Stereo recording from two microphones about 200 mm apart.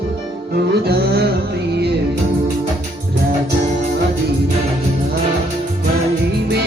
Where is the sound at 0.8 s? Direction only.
55° right (ahead or behind).